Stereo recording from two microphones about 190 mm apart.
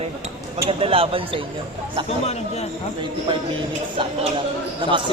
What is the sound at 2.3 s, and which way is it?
Speech, 35° left (ahead or behind).